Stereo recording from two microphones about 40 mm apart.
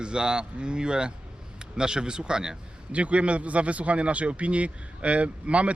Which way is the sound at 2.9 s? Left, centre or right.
Right.